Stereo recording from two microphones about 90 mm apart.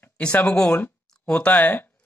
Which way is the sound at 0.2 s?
15° left (ahead or behind).